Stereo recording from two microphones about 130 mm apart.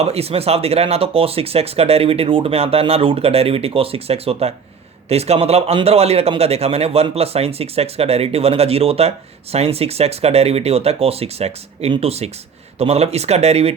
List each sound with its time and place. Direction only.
0.0 s speech: 50° right (ahead or behind)